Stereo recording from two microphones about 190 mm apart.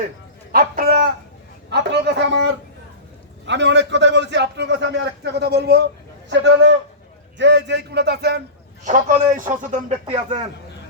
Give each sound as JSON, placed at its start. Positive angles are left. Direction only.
{"t": 0.5, "sound": "speech", "side_deg": -50}
{"t": 1.7, "sound": "a man's voice", "side_deg": -65}
{"t": 8.8, "sound": "a man's voice", "side_deg": -45}
{"t": 10.1, "sound": "a man's voice", "side_deg": -25}